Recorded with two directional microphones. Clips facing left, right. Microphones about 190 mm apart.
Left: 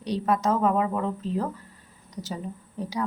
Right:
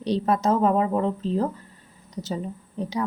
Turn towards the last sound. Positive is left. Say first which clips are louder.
# right 3 dB
turn(degrees=-20)  # may be behind; listen again after turning